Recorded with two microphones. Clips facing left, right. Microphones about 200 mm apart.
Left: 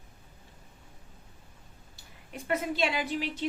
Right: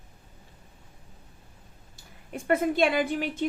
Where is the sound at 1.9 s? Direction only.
50° right (ahead or behind).